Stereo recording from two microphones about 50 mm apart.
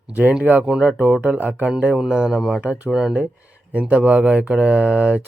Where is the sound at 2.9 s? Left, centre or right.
Centre.